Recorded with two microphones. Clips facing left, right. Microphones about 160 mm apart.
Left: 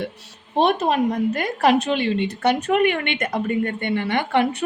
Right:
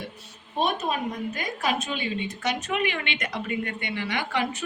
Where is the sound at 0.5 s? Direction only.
70° left (ahead or behind).